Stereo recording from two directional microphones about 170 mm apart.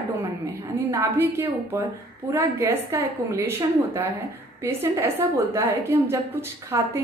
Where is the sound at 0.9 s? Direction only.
15° right (ahead or behind).